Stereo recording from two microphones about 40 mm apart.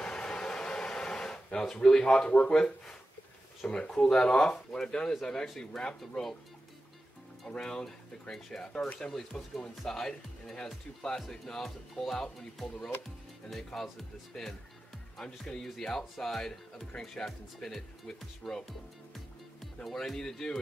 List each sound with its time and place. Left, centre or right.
0.0 s a sound: centre
3.6 s speech: left
3.9 s speech: centre
7.4 s speech: centre
14.3 s speech: centre